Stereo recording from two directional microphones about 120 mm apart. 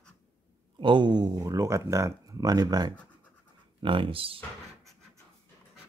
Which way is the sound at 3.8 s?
45° right (ahead or behind).